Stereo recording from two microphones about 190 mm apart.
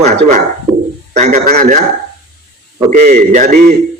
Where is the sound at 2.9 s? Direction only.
40° right (ahead or behind).